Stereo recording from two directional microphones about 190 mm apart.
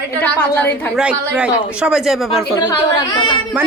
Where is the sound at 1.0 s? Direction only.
5° right (ahead or behind).